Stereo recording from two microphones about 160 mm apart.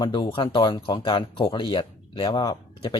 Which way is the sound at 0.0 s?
30° left (ahead or behind).